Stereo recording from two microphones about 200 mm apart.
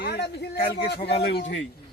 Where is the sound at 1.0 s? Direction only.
30° left (ahead or behind).